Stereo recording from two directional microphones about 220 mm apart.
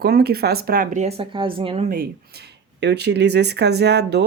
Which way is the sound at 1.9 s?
45° right (ahead or behind).